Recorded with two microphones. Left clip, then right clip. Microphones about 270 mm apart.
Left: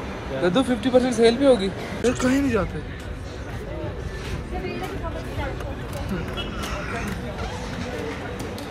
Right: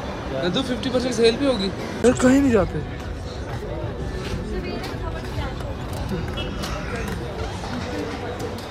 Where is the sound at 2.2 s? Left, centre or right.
Right.